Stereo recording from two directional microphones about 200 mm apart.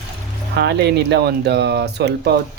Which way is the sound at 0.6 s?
60° right (ahead or behind).